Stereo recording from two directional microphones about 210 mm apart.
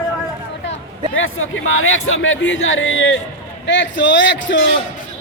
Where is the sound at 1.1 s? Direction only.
70° left (ahead or behind).